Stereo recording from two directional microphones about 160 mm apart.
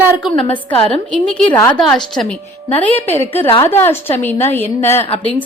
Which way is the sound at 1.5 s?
20° left (ahead or behind).